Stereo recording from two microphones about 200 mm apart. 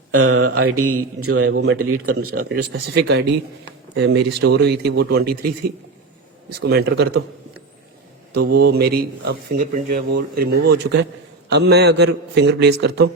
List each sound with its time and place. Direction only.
0.2 s speech: 90° right
2.6 s speech: 55° right (ahead or behind)
6.6 s a man's voice: 55° right (ahead or behind)
8.3 s a man's voice: 50° right (ahead or behind)